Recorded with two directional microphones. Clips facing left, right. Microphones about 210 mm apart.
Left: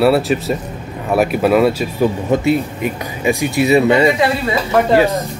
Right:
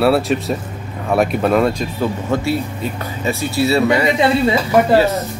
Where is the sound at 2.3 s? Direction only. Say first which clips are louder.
Left 4 dB; 15° left (ahead or behind).